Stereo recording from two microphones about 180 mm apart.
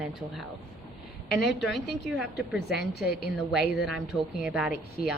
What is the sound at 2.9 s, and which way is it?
Speech, 60° left (ahead or behind).